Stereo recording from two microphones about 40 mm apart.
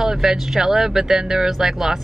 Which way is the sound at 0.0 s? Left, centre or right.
Centre.